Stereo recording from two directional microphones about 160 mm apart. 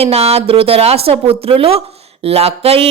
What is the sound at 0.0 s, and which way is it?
A woman's voice, 40° right (ahead or behind).